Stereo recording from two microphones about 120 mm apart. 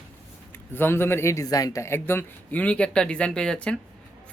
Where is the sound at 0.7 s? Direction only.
20° left (ahead or behind).